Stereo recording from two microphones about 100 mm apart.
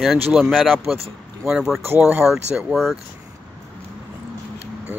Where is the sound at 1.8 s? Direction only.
25° right (ahead or behind).